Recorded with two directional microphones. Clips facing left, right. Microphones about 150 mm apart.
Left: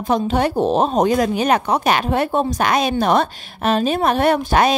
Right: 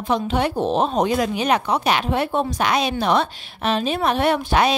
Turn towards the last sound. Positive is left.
turn(degrees=45)  # may be behind; listen again after turning